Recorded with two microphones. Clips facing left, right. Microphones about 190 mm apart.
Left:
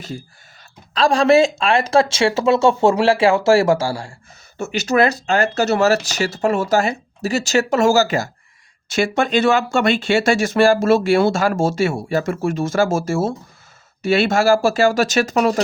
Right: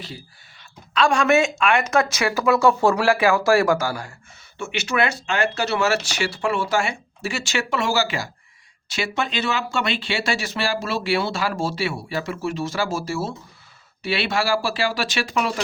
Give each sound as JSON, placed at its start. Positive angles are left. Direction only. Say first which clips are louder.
{"t": 0.9, "sound": "speech", "louder": "left 5 dB", "side_deg": 35}
{"t": 4.5, "sound": "speech", "louder": "left 6 dB", "side_deg": 40}